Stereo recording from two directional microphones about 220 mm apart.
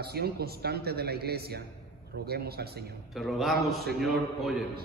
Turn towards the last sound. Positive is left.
turn(degrees=0)  # may be behind; listen again after turning